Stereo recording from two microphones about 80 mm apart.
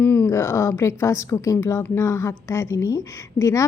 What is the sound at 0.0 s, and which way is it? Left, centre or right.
A woman's voice, left.